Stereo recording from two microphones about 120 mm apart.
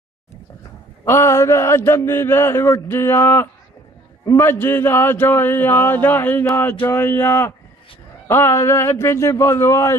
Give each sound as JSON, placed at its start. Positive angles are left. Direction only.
{"t": 1.0, "sound": "mantra", "side_deg": 25}